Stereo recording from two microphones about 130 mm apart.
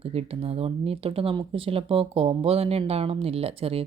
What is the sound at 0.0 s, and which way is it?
A woman's voice, 50° right (ahead or behind).